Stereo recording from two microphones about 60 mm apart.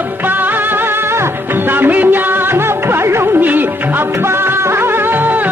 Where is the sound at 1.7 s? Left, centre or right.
Right.